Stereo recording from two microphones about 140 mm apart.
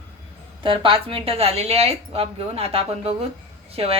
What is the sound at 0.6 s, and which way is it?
A woman's voice, 35° right (ahead or behind).